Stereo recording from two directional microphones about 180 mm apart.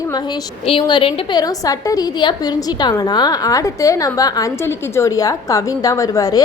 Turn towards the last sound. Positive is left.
turn(degrees=20)  # may be behind; listen again after turning